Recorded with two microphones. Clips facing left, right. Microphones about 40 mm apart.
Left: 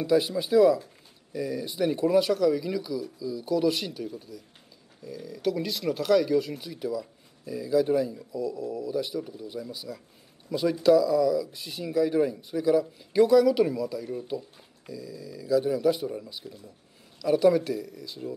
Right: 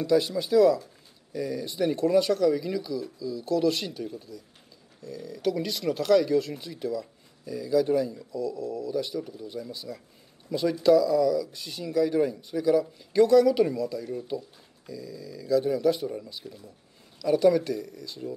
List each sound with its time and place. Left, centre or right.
0.0 s speech: centre